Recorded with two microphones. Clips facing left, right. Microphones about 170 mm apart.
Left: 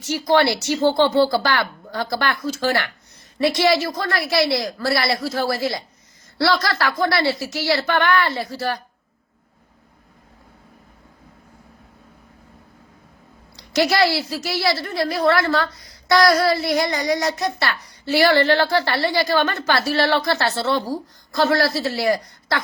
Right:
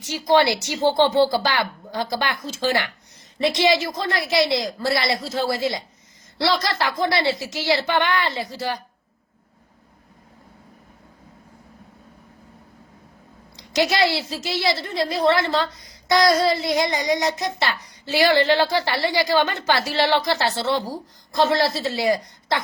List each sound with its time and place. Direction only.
0.0 s a woman's voice: 15° right (ahead or behind)
13.6 s a woman's voice: 20° right (ahead or behind)